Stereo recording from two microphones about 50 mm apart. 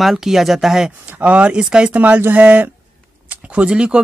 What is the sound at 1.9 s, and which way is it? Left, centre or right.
Speech, right.